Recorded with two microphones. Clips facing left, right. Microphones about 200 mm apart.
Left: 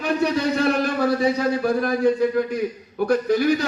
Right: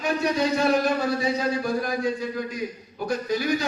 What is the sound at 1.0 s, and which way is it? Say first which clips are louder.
A man's voice: left 5 dB; 55° left (ahead or behind).